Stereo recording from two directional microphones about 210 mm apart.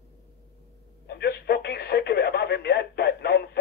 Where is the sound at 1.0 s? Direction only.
50° left (ahead or behind).